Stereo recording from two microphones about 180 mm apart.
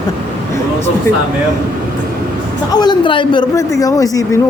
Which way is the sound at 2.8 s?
25° left (ahead or behind).